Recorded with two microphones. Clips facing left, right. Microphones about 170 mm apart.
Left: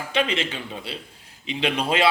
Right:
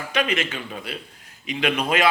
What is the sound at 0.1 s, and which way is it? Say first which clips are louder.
A man's voice: even; 30° left (ahead or behind).